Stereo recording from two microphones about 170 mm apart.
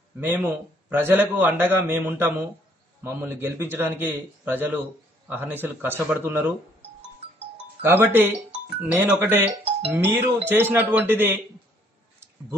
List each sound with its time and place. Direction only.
0.2 s a man's voice: 10° right (ahead or behind)
7.8 s a man's voice: 15° right (ahead or behind)
9.5 s speech: 35° right (ahead or behind)
9.9 s a man's voice: 10° right (ahead or behind)